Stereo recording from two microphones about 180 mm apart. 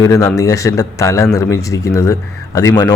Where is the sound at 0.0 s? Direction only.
15° left (ahead or behind).